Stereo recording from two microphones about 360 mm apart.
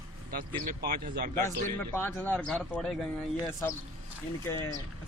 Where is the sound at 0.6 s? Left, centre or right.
Right.